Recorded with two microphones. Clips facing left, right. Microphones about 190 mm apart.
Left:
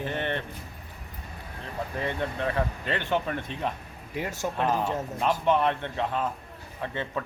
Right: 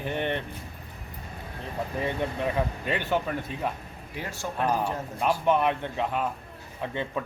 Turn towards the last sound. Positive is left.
turn(degrees=-15)  # may be behind; listen again after turning